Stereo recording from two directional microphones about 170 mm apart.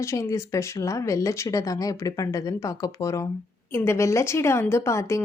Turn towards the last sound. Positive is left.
turn(degrees=15)  # may be behind; listen again after turning